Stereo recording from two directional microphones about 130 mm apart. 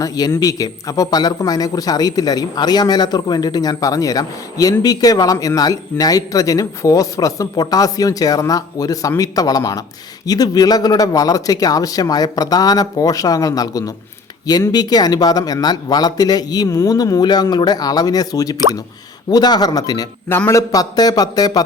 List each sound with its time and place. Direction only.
0.0 s a man's voice: 30° left (ahead or behind)
20.2 s a man's voice: 15° left (ahead or behind)